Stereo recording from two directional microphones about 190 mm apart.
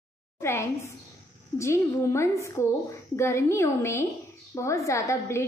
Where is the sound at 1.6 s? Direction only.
15° left (ahead or behind).